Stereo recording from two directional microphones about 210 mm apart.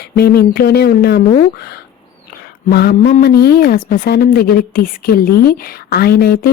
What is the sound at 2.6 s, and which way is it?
Speech, 50° left (ahead or behind).